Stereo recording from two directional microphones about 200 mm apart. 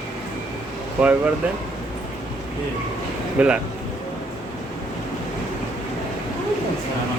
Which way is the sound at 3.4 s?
5° right (ahead or behind).